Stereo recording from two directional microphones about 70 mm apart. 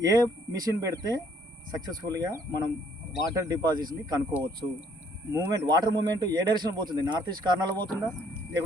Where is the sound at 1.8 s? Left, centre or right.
Right.